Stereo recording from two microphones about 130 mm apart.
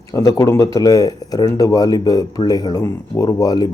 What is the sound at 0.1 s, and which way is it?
A man's voice, 25° left (ahead or behind).